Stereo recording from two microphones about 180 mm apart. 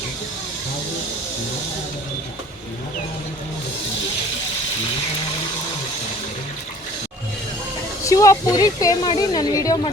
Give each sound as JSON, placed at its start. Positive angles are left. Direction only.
{"t": 8.0, "sound": "speech", "side_deg": 20}